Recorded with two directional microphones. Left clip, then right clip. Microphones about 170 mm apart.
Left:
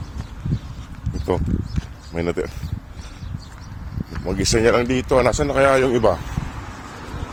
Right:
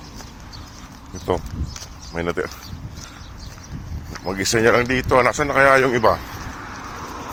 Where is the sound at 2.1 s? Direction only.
45° left (ahead or behind).